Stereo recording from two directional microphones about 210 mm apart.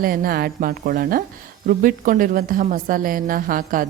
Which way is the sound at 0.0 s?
45° right (ahead or behind).